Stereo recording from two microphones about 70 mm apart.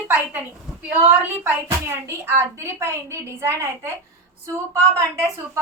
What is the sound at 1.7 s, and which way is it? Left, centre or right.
Speech, right.